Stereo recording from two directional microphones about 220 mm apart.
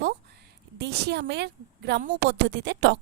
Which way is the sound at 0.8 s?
50° right (ahead or behind).